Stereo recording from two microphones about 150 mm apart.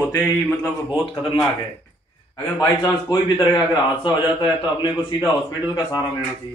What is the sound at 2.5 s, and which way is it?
A man's voice, 20° left (ahead or behind).